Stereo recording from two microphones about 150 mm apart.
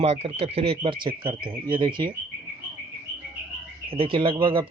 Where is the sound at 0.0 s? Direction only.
45° right (ahead or behind).